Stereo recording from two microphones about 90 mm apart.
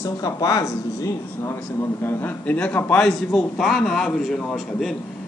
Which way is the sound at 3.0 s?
10° left (ahead or behind).